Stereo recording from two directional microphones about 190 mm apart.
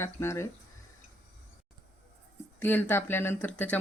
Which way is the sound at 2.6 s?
10° left (ahead or behind).